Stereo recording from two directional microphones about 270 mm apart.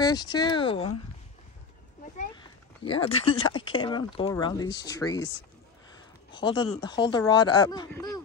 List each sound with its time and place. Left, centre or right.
0.0 s speech: centre
2.8 s speech: centre
6.3 s speech: centre